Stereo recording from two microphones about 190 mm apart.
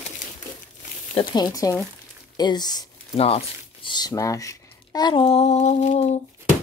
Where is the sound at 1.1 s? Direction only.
20° left (ahead or behind).